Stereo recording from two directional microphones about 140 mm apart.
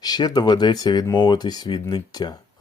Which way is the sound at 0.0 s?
30° left (ahead or behind).